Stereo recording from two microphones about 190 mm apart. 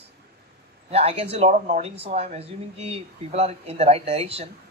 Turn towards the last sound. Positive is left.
turn(degrees=-30)  # may be behind; listen again after turning